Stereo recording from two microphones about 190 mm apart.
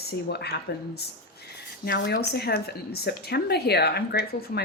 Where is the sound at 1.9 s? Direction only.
50° left (ahead or behind).